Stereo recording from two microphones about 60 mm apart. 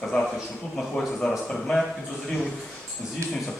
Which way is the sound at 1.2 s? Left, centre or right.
Centre.